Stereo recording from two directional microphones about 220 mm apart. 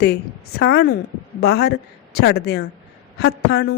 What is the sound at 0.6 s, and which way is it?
Speech, 50° left (ahead or behind).